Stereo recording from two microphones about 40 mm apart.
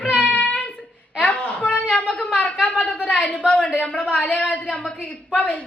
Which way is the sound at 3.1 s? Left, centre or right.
Left.